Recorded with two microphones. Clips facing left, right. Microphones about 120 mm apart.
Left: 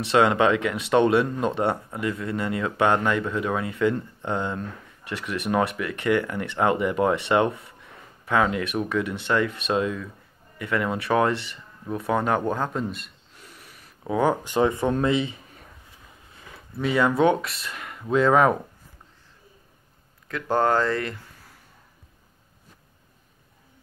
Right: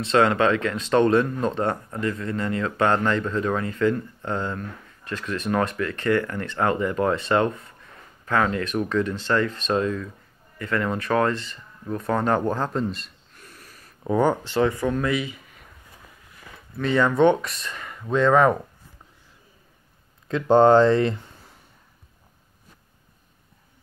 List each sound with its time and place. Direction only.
0.1 s speech: 15° left (ahead or behind)
13.4 s a sound: 20° left (ahead or behind)
14.0 s speech: 5° left (ahead or behind)
14.5 s speech: 20° left (ahead or behind)
16.8 s speech: 5° left (ahead or behind)
20.2 s speech: 25° right (ahead or behind)